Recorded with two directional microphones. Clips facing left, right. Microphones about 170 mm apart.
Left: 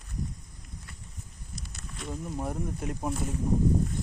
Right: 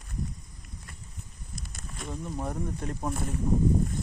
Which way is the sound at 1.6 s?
50° right (ahead or behind).